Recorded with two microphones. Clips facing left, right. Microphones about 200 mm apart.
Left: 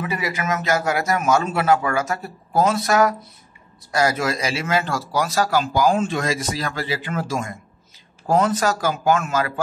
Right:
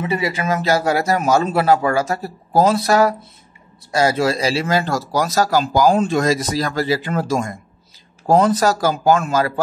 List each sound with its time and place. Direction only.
0.0 s speech: 30° right (ahead or behind)